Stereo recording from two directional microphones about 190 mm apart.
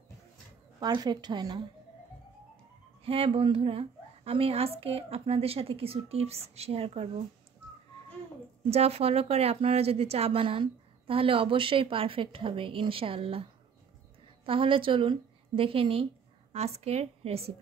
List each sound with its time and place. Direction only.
0.7 s a woman's voice: 20° right (ahead or behind)
3.0 s a woman's voice: 30° right (ahead or behind)
8.6 s a woman's voice: 35° right (ahead or behind)